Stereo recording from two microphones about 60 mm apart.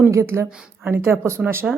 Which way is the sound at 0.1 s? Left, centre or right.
Right.